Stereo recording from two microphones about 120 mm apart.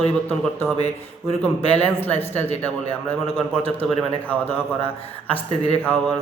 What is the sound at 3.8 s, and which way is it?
Speech, 5° left (ahead or behind).